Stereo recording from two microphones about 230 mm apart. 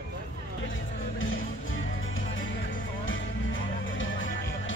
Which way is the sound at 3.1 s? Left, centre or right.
Left.